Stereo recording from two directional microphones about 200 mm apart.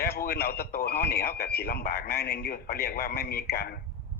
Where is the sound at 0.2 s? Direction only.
50° left (ahead or behind).